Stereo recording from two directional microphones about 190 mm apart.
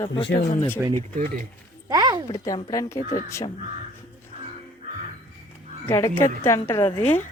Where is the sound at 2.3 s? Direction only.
25° left (ahead or behind).